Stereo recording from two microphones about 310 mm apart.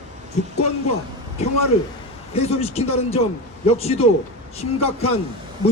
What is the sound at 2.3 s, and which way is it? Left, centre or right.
A man's voice, centre.